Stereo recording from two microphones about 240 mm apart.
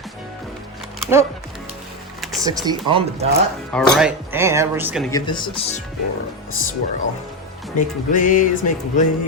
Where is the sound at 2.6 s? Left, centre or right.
Right.